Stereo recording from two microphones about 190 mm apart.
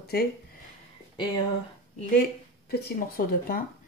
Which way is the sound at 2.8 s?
50° left (ahead or behind).